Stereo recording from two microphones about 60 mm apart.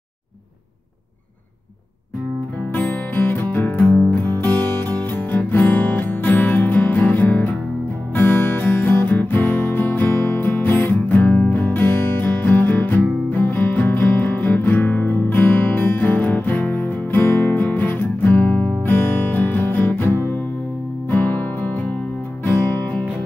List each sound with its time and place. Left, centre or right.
2.7 s music: left